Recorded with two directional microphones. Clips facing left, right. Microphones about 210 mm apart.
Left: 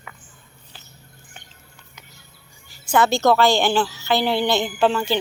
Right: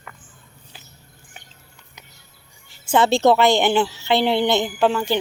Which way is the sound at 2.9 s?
30° right (ahead or behind).